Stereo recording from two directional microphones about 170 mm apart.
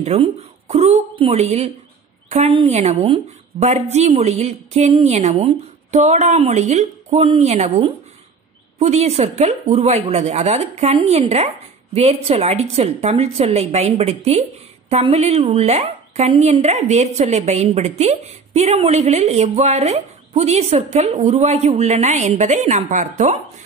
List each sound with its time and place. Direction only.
0.0 s speech: 35° right (ahead or behind)